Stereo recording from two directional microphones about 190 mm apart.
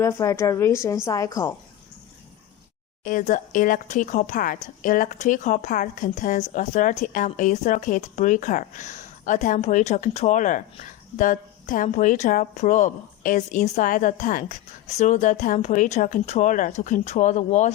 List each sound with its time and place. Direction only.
0.0 s speech: 15° left (ahead or behind)
3.0 s speech: 45° left (ahead or behind)